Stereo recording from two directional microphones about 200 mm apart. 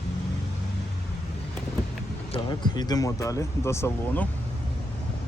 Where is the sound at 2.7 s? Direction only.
20° left (ahead or behind).